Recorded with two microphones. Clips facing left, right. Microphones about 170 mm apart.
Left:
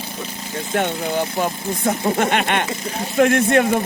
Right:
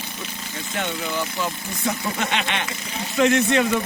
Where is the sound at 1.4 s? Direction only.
50° left (ahead or behind).